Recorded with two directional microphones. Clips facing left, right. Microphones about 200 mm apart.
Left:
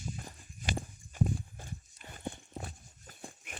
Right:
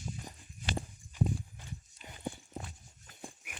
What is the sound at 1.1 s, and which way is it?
Clip-clop, 45° left (ahead or behind).